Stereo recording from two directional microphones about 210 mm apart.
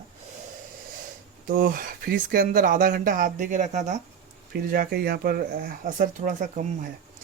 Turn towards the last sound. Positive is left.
turn(degrees=-40)  # may be behind; listen again after turning